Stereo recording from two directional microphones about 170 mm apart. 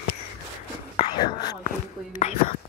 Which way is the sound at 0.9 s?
30° left (ahead or behind).